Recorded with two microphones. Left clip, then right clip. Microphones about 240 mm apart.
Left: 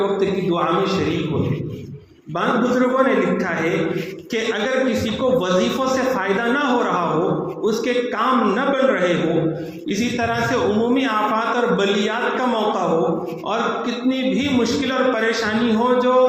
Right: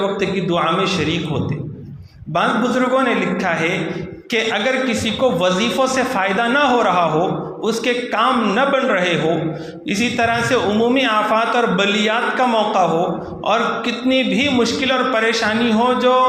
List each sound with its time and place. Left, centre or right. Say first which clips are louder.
0.2 s a man's voice: right 1 dB; right
2.3 s a man's voice: right 2 dB; right
4.9 s a man's voice: right 2 dB; right
14.1 s a man's voice: right 5 dB; right